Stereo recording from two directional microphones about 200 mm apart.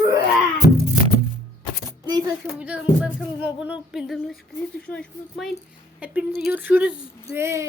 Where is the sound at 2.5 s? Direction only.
5° right (ahead or behind).